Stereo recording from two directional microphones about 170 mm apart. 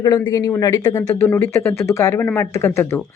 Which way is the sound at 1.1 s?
10° left (ahead or behind).